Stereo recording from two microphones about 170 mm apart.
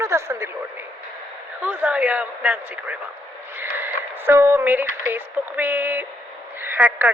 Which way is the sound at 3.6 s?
10° right (ahead or behind).